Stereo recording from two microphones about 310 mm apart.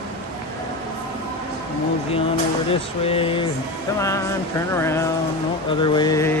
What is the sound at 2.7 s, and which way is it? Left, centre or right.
Mantra, centre.